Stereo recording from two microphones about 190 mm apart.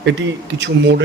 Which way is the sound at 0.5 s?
65° right (ahead or behind).